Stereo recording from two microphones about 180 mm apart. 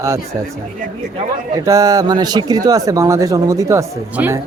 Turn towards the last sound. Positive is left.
turn(degrees=-10)  # may be behind; listen again after turning